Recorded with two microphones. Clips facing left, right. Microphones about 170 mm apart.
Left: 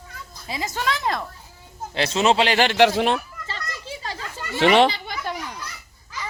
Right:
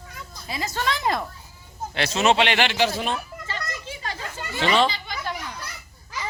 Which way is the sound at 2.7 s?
70° left (ahead or behind).